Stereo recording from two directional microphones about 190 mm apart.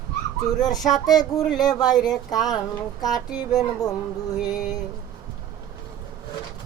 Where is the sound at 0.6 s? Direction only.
20° left (ahead or behind).